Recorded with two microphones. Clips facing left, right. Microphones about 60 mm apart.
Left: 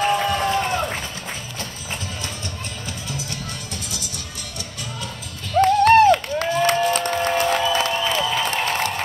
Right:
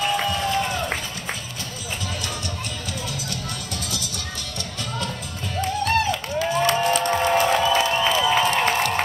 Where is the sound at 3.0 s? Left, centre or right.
Left.